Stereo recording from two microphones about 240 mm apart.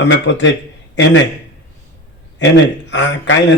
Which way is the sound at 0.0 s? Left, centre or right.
Left.